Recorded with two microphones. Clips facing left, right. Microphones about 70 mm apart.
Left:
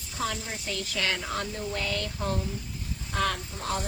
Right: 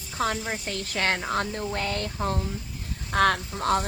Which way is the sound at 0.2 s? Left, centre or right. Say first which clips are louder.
Right 5 dB; right.